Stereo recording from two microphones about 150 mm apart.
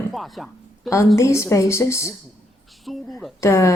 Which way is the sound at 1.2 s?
20° left (ahead or behind).